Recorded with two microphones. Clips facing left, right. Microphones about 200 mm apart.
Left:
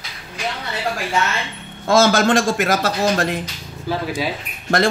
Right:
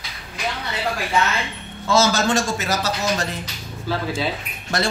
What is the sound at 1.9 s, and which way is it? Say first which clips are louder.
A man's voice: left 4 dB; 55° left (ahead or behind).